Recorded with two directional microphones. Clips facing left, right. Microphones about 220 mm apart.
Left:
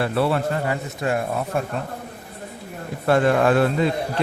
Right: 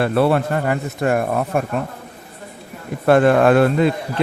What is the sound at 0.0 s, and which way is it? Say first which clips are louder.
A man's voice: right 5 dB; 55° right (ahead or behind).